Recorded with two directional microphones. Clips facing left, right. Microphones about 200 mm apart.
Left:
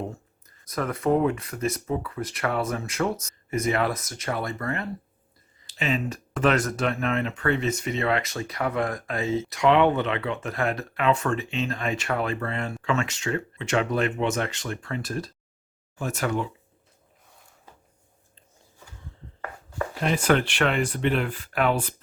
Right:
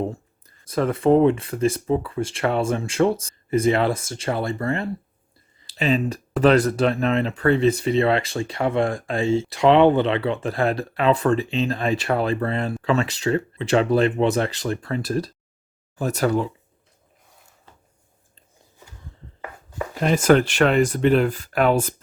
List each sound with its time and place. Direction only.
0.1 s speech: 30° right (ahead or behind)
20.0 s speech: 40° right (ahead or behind)